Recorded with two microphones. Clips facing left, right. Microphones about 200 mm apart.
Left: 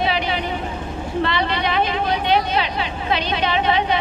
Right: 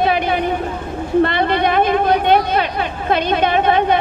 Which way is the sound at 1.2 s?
50° right (ahead or behind).